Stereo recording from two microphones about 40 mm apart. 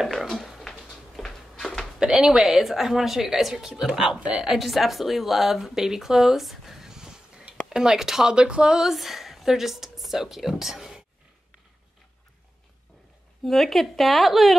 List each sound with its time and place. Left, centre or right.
0.3 s a sound: centre
1.6 s a sound: centre
2.0 s a woman's voice: centre
8.4 s speech: right
8.7 s a woman's voice: centre
13.5 s speech: centre